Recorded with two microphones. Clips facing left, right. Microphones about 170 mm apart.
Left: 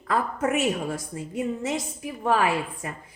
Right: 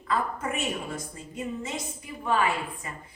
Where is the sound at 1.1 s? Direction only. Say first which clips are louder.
Left 6 dB; 90° left.